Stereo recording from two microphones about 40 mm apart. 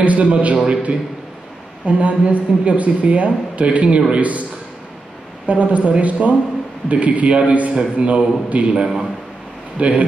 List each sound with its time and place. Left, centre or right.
0.0 s a woman's voice: right
1.9 s a woman's voice: right
5.5 s a woman's voice: right
8.7 s a man's voice: centre
9.8 s a woman's voice: right